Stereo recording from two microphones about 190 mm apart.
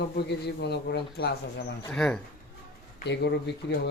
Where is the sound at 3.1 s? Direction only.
65° left (ahead or behind).